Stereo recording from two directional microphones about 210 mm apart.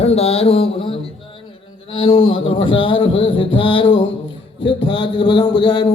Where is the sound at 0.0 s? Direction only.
30° left (ahead or behind).